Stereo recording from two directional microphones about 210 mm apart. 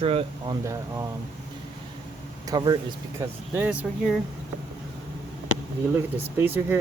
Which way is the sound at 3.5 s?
10° right (ahead or behind).